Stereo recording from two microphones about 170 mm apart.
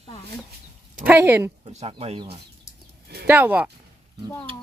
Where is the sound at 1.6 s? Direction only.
35° right (ahead or behind).